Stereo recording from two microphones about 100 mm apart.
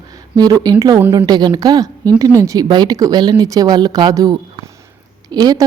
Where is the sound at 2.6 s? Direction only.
45° right (ahead or behind).